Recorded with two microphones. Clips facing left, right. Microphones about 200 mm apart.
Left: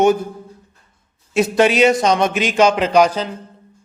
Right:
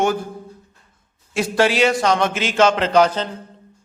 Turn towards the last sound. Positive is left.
turn(degrees=10)  # may be behind; listen again after turning